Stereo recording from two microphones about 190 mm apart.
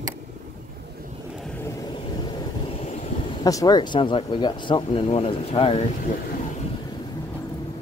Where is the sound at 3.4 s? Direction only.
20° left (ahead or behind).